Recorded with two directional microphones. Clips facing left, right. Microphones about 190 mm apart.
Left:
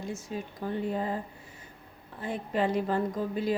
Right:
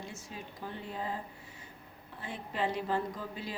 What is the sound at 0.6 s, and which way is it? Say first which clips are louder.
Speech: left 9 dB; 50° left (ahead or behind).